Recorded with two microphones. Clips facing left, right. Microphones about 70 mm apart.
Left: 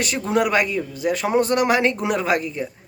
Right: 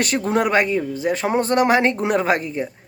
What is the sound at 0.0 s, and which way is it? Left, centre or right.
Speech, right.